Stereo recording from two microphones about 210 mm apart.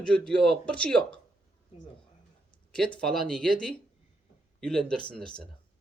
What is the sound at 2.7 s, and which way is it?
A man's voice, 5° left (ahead or behind).